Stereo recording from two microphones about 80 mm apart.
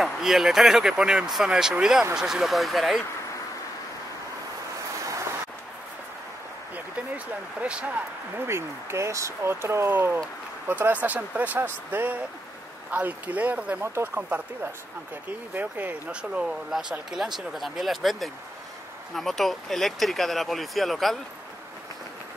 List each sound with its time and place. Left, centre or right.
0.0 s speech: centre
7.6 s speech: centre
8.5 s speech: right; by 21.2 s centre